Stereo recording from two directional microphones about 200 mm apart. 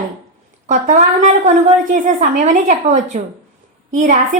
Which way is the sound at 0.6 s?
40° right (ahead or behind).